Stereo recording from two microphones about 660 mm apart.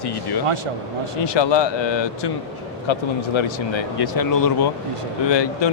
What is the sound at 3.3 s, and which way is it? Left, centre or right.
Speech, left.